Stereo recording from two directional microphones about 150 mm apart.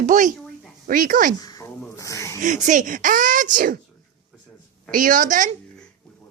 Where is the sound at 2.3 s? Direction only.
55° right (ahead or behind).